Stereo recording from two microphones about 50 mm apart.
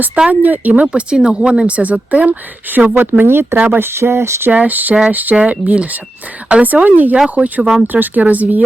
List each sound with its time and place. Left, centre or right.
0.3 s speech: right
1.1 s speech: centre
1.6 s speech: right
4.5 s speech: right